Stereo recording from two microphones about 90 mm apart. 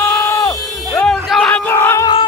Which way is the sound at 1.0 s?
5° left (ahead or behind).